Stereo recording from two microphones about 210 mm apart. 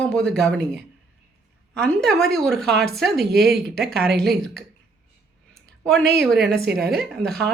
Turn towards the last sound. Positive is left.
turn(degrees=5)  # may be behind; listen again after turning